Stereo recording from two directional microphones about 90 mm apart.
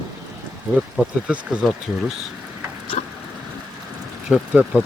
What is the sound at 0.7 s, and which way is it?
Speech, 10° right (ahead or behind).